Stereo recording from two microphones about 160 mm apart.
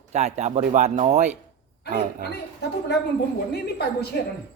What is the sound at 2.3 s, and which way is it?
Speech, 90° left.